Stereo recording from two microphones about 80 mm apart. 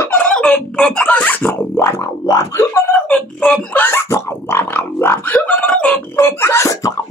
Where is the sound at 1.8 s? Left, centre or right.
Left.